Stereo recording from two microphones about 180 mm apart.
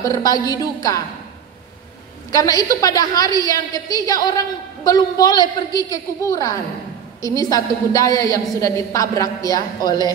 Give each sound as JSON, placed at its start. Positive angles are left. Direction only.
{"t": 0.0, "sound": "a woman's voice", "side_deg": 20}
{"t": 2.3, "sound": "a woman's voice", "side_deg": 20}